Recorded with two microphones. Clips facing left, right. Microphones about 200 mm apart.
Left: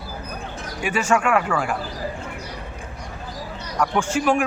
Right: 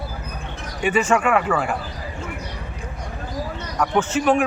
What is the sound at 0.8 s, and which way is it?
Speech, 10° left (ahead or behind).